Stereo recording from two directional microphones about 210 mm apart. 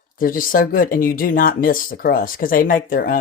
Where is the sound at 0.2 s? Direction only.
40° left (ahead or behind).